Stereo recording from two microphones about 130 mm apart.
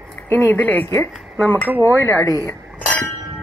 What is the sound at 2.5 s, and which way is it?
Chink, 10° left (ahead or behind).